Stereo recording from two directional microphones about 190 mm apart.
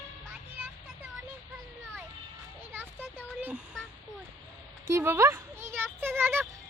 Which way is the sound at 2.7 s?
10° right (ahead or behind).